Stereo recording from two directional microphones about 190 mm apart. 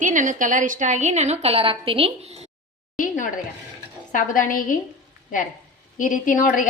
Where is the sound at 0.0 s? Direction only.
40° right (ahead or behind).